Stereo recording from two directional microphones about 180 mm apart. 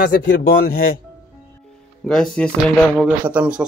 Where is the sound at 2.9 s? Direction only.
10° right (ahead or behind).